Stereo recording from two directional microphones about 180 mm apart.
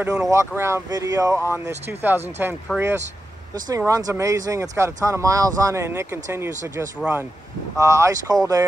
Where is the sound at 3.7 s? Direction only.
20° right (ahead or behind).